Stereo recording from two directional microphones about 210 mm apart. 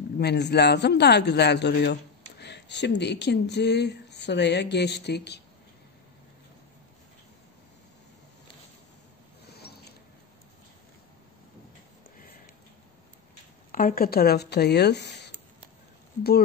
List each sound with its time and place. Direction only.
0.2 s speech: 55° left (ahead or behind)
9.5 s mechanisms: 50° left (ahead or behind)
13.7 s speech: 40° left (ahead or behind)